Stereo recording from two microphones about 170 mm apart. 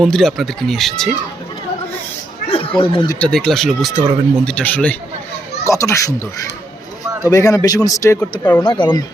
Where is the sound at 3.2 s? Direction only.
5° left (ahead or behind); by 9.0 s 25° left (ahead or behind).